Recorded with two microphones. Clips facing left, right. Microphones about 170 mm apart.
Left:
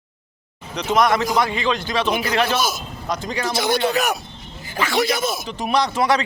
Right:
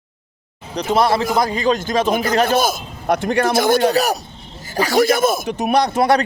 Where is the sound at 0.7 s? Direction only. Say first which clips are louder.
Right 2 dB; 35° right (ahead or behind).